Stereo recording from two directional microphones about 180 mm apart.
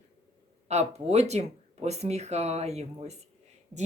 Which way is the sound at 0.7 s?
40° right (ahead or behind).